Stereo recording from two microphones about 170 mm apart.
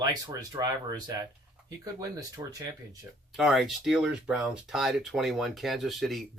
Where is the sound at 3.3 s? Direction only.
Centre (ahead or behind).